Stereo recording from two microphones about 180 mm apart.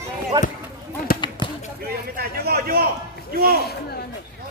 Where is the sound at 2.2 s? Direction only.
55° right (ahead or behind).